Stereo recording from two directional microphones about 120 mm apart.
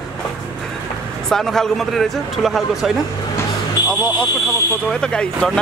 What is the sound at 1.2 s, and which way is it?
Speech, 5° left (ahead or behind).